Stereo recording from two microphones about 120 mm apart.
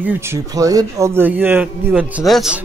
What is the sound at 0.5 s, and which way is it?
A man's voice, 30° right (ahead or behind).